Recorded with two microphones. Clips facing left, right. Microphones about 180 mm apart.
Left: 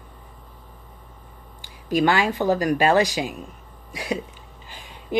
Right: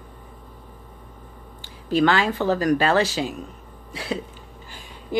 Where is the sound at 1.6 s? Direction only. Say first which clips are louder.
Right 1 dB; 15° left (ahead or behind).